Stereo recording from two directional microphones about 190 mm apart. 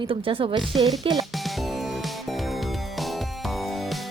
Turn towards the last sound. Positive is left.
turn(degrees=0)  # may be behind; listen again after turning